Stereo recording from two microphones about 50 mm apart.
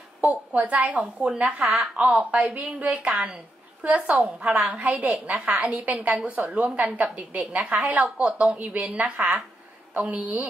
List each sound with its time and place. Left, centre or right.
0.2 s a woman's voice: right